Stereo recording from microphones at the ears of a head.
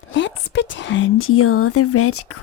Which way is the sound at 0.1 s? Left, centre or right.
Left.